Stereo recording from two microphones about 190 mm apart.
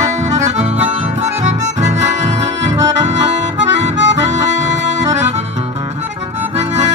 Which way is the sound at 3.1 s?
35° right (ahead or behind).